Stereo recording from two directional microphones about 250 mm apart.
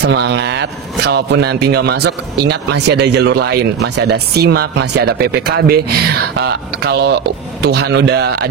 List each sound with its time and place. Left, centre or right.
0.0 s a man's voice: right